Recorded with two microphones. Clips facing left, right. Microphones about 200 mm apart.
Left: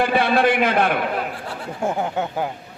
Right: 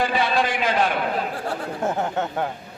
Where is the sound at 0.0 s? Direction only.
55° left (ahead or behind).